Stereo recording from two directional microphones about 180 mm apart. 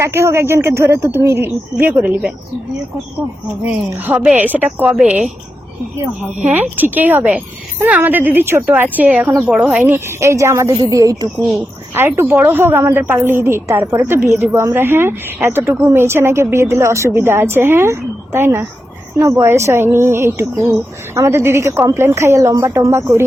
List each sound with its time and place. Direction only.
0.0 s speech: 15° right (ahead or behind)
3.7 s speech: 10° right (ahead or behind)
6.4 s a woman's voice: 10° right (ahead or behind)